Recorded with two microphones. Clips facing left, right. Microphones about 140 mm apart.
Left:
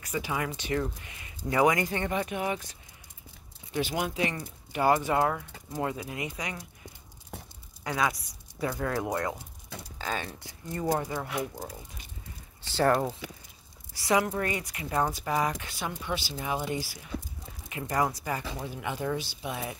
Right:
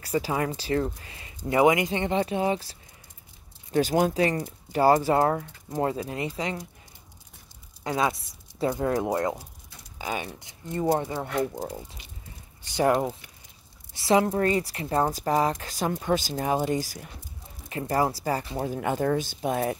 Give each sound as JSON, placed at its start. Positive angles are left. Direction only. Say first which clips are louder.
{"t": 0.0, "sound": "speech", "louder": "right 5 dB", "side_deg": -35}
{"t": 7.8, "sound": "speech", "louder": "right 3 dB", "side_deg": -25}
{"t": 9.9, "sound": "speech", "louder": "right 3 dB", "side_deg": -15}
{"t": 12.6, "sound": "speech", "louder": "right 2 dB", "side_deg": -15}
{"t": 13.2, "sound": "speech", "louder": "left 12 dB", "side_deg": 90}
{"t": 13.9, "sound": "speech", "louder": "right 5 dB", "side_deg": -30}
{"t": 18.6, "sound": "speech", "louder": "right 7 dB", "side_deg": -45}